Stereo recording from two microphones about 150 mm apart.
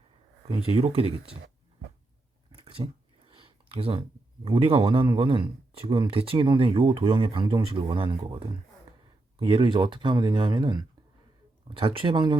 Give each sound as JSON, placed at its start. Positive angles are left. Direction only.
{"t": 0.5, "sound": "speech", "side_deg": -40}
{"t": 2.6, "sound": "a sound", "side_deg": -35}
{"t": 4.4, "sound": "speech", "side_deg": -35}